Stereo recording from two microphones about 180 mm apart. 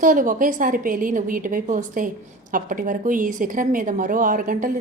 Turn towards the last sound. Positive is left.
turn(degrees=-50)  # may be behind; listen again after turning